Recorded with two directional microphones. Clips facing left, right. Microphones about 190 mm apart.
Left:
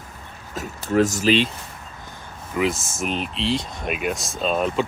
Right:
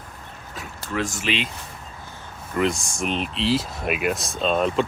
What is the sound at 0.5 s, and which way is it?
Speech, 40° left (ahead or behind).